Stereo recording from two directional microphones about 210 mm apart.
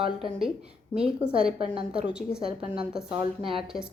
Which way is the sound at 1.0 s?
5° right (ahead or behind).